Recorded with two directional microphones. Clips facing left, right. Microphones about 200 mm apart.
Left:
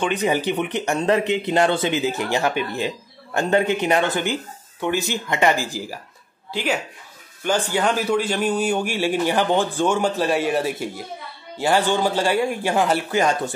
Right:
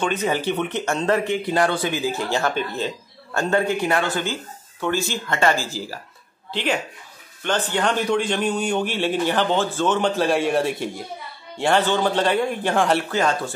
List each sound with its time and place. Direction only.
0.0 s a man's voice: 15° left (ahead or behind)